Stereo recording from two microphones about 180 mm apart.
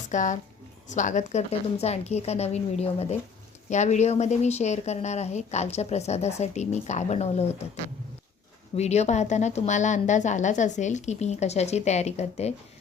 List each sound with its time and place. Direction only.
0.1 s a woman's voice: 45° left (ahead or behind)
8.7 s a woman's voice: 35° left (ahead or behind)